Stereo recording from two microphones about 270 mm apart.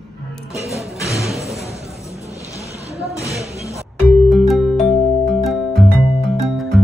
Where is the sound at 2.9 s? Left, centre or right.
Right.